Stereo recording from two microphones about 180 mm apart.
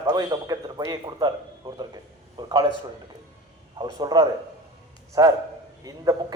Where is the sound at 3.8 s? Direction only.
20° right (ahead or behind).